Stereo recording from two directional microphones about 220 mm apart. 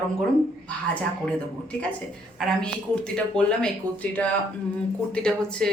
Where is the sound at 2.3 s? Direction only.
5° left (ahead or behind).